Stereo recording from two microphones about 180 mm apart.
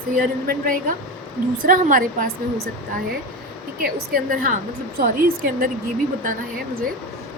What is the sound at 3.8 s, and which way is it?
Speech, 55° right (ahead or behind).